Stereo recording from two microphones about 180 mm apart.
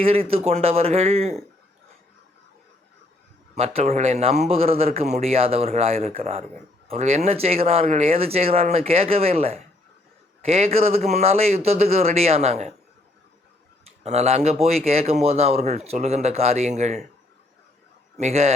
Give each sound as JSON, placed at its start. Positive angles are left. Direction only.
{"t": 0.0, "sound": "speech", "side_deg": -35}
{"t": 3.5, "sound": "a man's voice", "side_deg": -35}
{"t": 14.0, "sound": "speech", "side_deg": -40}
{"t": 18.2, "sound": "speech", "side_deg": -35}